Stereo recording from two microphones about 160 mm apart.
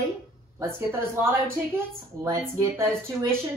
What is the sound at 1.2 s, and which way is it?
A woman's voice, 15° right (ahead or behind).